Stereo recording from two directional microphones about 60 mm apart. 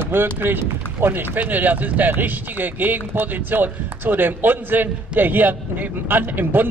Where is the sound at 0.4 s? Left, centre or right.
Right.